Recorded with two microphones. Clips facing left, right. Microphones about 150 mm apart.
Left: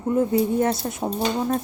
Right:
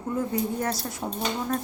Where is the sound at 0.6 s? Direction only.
25° left (ahead or behind).